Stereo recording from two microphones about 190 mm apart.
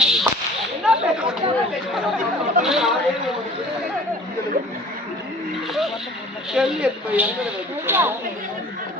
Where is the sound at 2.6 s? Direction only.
Centre (ahead or behind).